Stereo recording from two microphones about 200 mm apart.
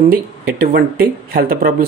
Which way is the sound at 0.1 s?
45° right (ahead or behind).